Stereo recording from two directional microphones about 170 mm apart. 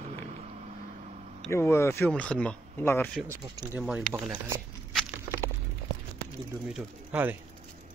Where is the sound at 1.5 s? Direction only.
15° left (ahead or behind).